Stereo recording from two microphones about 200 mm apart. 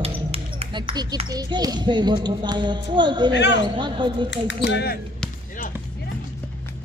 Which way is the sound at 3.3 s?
60° left (ahead or behind).